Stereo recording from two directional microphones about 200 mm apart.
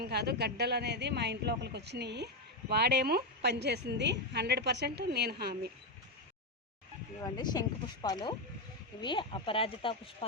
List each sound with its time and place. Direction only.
0.0 s speech: 55° right (ahead or behind)
7.2 s speech: 20° left (ahead or behind)